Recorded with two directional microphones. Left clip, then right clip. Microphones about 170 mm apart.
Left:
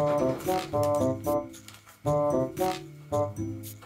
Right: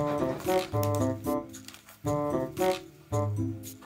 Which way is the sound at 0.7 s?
10° right (ahead or behind).